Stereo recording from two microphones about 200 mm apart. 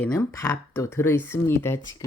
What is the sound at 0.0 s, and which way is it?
Speech, 15° left (ahead or behind).